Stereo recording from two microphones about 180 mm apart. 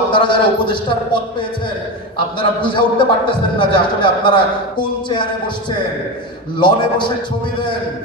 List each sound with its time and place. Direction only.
0.1 s a man's voice: 25° left (ahead or behind)
6.6 s a man's voice: 25° left (ahead or behind)